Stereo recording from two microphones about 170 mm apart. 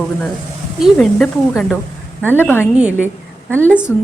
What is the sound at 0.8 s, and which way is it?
Speech, centre (ahead or behind).